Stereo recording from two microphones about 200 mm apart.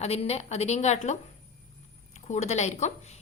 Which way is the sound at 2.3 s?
35° left (ahead or behind).